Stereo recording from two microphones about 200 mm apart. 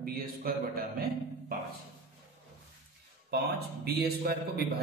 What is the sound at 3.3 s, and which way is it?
Speech, 50° right (ahead or behind).